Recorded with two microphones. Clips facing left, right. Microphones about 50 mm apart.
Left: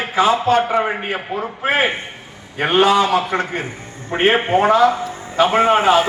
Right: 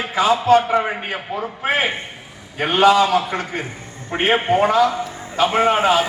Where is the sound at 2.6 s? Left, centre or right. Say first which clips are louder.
Even; left.